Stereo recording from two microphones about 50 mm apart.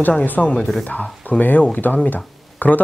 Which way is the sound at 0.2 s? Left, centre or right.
Left.